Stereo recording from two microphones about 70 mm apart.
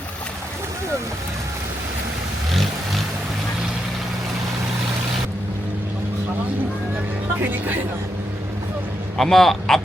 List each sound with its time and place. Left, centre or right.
2.5 s vehicle: centre
7.3 s speech: right
9.1 s a man's voice: centre